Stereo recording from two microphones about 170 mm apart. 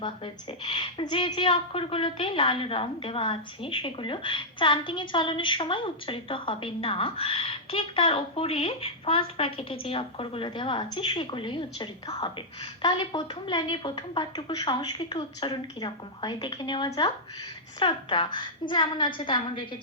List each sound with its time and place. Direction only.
0.6 s a woman's voice: 30° left (ahead or behind)